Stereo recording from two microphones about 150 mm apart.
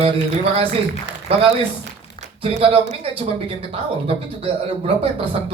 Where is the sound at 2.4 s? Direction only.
40° right (ahead or behind).